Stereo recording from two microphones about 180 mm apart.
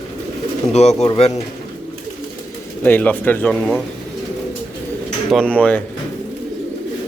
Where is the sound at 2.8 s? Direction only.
10° left (ahead or behind).